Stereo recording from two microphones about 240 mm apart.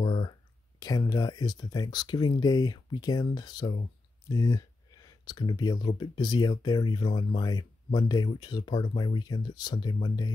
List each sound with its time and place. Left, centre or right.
0.0 s speech: centre